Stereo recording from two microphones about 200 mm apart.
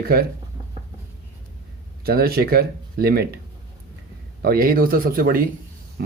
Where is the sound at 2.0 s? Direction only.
50° right (ahead or behind).